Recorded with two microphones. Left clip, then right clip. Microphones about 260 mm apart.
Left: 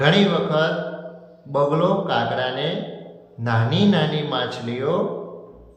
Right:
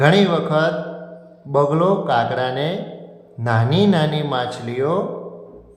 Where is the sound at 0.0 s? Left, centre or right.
Right.